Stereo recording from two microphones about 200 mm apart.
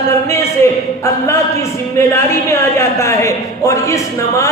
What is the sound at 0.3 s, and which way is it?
A man's voice, 15° left (ahead or behind).